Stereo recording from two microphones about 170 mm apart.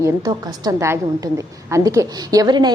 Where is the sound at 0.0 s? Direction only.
20° right (ahead or behind).